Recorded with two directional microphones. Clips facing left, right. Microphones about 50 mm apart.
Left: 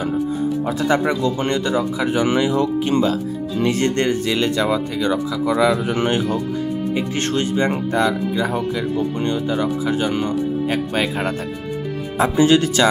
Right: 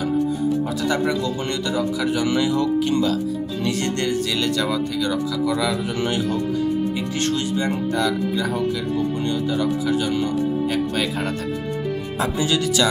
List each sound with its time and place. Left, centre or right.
0.7 s speech: left